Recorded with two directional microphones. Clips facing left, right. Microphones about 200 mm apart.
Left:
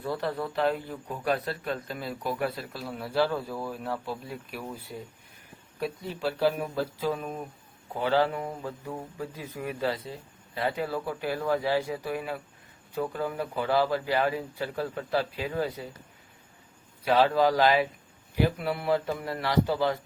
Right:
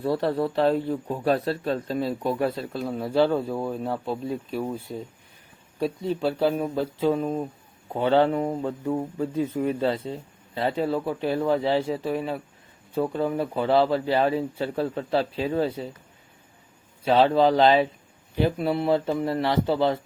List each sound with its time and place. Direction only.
0.0 s a man's voice: 30° right (ahead or behind)
5.8 s a man's voice: 30° right (ahead or behind)
17.0 s a man's voice: 25° right (ahead or behind)